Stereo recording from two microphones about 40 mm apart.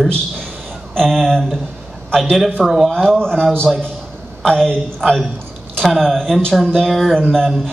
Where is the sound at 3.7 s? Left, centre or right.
Centre.